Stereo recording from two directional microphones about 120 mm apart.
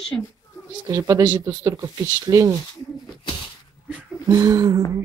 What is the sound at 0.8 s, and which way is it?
Speech, 30° right (ahead or behind).